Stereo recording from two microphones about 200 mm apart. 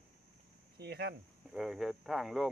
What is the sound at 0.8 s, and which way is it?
Speech, 55° right (ahead or behind).